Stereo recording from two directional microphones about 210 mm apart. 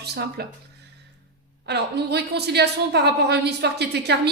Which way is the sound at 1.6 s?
50° right (ahead or behind).